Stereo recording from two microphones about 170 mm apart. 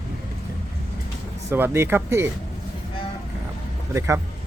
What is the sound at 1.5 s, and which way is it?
Speech, 15° right (ahead or behind).